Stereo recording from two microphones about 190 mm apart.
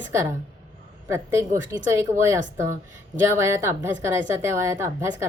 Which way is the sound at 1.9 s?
15° right (ahead or behind).